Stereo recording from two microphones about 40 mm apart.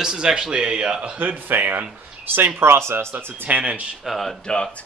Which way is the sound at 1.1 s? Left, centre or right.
Right.